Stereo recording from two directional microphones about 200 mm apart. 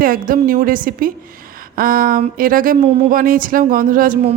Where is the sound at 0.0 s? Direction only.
45° right (ahead or behind).